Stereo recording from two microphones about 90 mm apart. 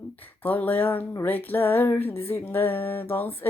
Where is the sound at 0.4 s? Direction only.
20° left (ahead or behind).